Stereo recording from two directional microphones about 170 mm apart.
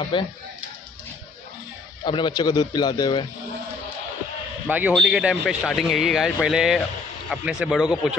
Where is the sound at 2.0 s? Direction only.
25° left (ahead or behind).